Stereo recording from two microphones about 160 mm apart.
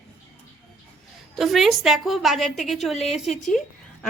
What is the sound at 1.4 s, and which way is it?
A woman's voice, centre (ahead or behind).